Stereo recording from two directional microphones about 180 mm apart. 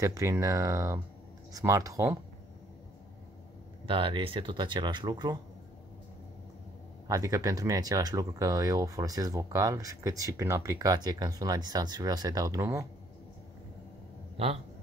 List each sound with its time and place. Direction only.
0.0 s speech: 15° right (ahead or behind)
3.8 s speech: 30° right (ahead or behind)
7.1 s speech: 20° right (ahead or behind)
14.3 s a sound: 35° right (ahead or behind)